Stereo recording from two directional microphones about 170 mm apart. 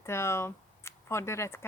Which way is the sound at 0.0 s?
15° left (ahead or behind).